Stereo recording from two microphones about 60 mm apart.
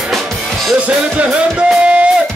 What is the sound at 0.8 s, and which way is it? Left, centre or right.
Music, right.